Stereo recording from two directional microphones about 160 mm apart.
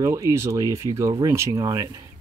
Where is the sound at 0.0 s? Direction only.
20° right (ahead or behind).